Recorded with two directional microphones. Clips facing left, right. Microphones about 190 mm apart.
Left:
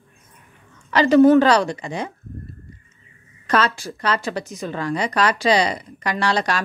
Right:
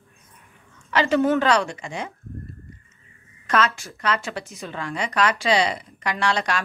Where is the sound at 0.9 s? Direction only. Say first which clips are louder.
Left 7 dB; 40° left (ahead or behind).